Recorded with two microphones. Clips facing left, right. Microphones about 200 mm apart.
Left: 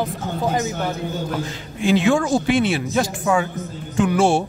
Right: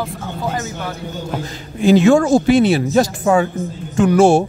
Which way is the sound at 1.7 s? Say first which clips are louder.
Right 6 dB; 40° right (ahead or behind).